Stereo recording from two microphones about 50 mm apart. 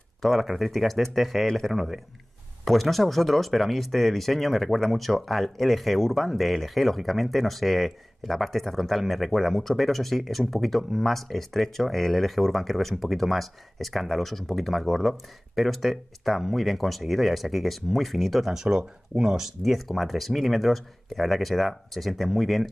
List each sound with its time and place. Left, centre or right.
0.2 s speech: centre